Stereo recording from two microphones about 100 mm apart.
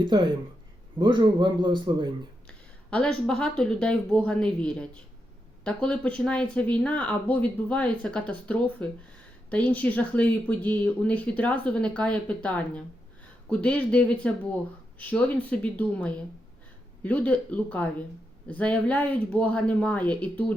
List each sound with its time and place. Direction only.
0.1 s a man's voice: 50° right (ahead or behind)
2.5 s speech: 10° left (ahead or behind)